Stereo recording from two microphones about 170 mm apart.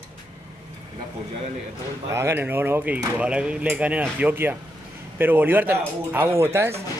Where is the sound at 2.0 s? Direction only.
15° right (ahead or behind).